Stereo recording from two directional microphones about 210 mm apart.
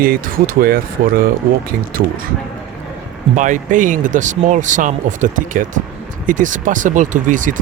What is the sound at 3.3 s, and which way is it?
Speech, 35° right (ahead or behind).